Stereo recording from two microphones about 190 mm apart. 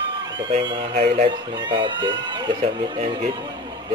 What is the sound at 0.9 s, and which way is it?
Speech, 40° right (ahead or behind).